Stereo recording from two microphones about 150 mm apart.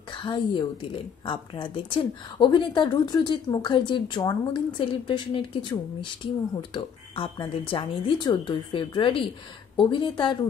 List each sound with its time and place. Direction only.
0.1 s a woman's voice: 30° left (ahead or behind)